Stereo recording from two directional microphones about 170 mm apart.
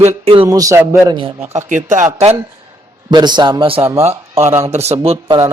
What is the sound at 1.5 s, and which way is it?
Speech, 45° right (ahead or behind).